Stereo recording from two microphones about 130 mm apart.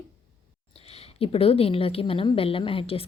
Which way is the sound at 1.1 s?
45° left (ahead or behind).